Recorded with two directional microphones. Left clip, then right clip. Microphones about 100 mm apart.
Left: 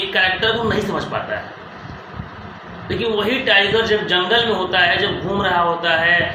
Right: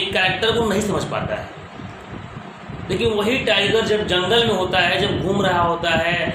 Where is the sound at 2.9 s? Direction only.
50° right (ahead or behind).